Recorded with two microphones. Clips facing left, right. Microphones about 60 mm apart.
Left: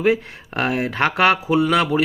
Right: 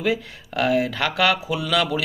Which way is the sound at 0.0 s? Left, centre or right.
Left.